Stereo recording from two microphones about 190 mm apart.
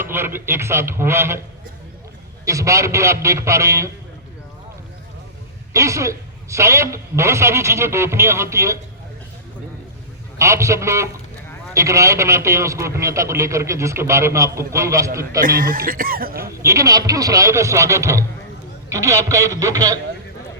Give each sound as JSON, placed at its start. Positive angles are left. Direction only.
{"t": 0.0, "sound": "a man's voice", "side_deg": -10}
{"t": 2.4, "sound": "a man's voice", "side_deg": -15}
{"t": 5.7, "sound": "a man's voice", "side_deg": -15}
{"t": 10.3, "sound": "a man's voice", "side_deg": -15}
{"t": 15.4, "sound": "speech", "side_deg": -50}
{"t": 16.6, "sound": "a man's voice", "side_deg": -15}